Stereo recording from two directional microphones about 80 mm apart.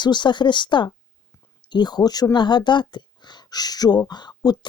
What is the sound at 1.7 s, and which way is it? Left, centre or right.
Speech, left.